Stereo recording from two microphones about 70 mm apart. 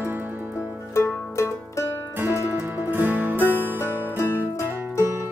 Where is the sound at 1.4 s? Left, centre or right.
Left.